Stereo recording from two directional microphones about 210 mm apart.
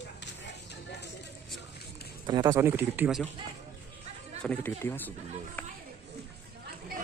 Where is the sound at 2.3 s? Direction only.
20° right (ahead or behind).